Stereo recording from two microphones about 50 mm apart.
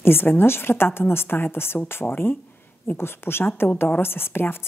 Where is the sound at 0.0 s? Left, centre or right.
Left.